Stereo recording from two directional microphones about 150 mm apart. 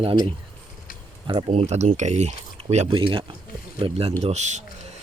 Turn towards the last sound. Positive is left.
turn(degrees=-50)  # may be behind; listen again after turning